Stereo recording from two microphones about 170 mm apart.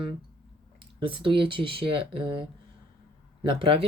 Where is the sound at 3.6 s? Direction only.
35° right (ahead or behind).